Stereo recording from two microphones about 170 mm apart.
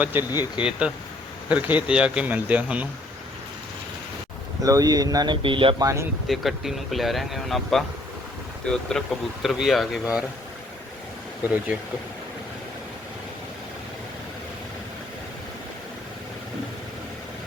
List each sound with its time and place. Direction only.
0.0 s speech: 10° right (ahead or behind)
0.3 s speech: 25° left (ahead or behind)
0.6 s speech: 5° right (ahead or behind)
4.6 s speech: 20° right (ahead or behind)
6.2 s speech: centre (ahead or behind)
11.4 s speech: 10° right (ahead or behind)